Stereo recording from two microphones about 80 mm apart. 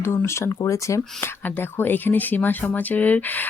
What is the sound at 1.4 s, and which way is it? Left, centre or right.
Speech, left.